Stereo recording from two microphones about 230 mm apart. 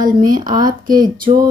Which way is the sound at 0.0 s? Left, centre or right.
Right.